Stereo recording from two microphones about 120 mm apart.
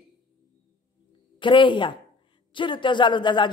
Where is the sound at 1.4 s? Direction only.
40° left (ahead or behind).